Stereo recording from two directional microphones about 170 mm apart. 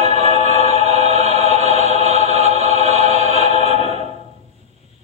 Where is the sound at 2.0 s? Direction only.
40° right (ahead or behind).